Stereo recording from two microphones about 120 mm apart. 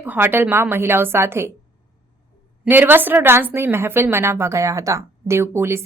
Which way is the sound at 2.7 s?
15° right (ahead or behind).